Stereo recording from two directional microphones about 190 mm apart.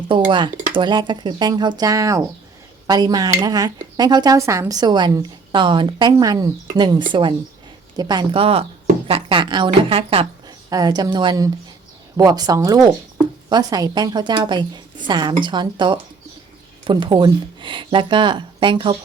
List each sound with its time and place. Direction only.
0.3 s speech: 25° right (ahead or behind)
10.7 s speech: 20° right (ahead or behind)